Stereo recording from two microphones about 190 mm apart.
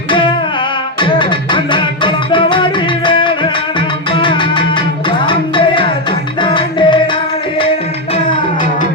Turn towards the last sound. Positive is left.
turn(degrees=25)  # may be behind; listen again after turning